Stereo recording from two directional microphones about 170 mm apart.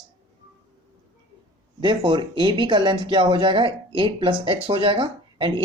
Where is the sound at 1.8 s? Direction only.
25° right (ahead or behind).